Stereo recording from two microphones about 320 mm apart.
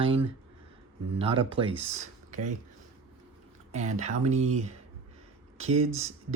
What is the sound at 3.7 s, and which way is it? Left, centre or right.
Speech, right.